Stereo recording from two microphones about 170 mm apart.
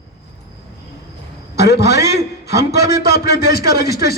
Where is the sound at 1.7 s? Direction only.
70° left (ahead or behind).